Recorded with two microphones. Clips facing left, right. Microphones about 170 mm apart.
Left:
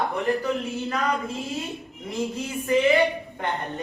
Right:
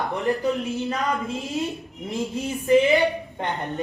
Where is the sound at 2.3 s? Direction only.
20° right (ahead or behind).